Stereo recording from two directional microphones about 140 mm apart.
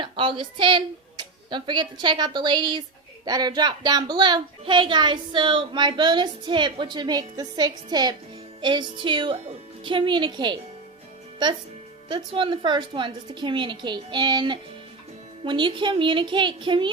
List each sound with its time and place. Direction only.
0.0 s speech: 35° right (ahead or behind)